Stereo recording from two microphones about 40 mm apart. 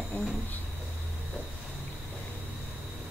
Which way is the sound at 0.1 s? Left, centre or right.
Left.